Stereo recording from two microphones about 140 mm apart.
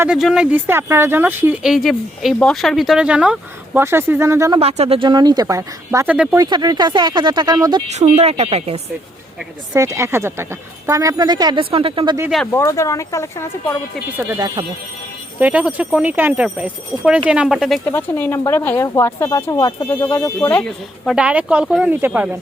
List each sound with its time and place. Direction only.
0.2 s speech: centre (ahead or behind)
0.5 s speech: 15° right (ahead or behind)
1.6 s a woman's voice: centre (ahead or behind); by 4.6 s 20° right (ahead or behind)
4.6 s a woman's voice: 45° right (ahead or behind)
5.0 s a woman's voice: 30° right (ahead or behind)
7.9 s a woman's voice: 55° right (ahead or behind)
9.7 s a woman's voice: 20° right (ahead or behind); by 12.1 s 40° right (ahead or behind)
12.5 s speech: 20° left (ahead or behind)
14.3 s a woman's voice: 30° right (ahead or behind)
15.4 s speech: 10° right (ahead or behind)
17.8 s speech: 15° left (ahead or behind)
21.2 s speech: 10° right (ahead or behind)